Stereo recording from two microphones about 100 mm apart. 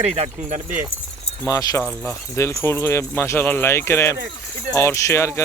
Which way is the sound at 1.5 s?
35° left (ahead or behind).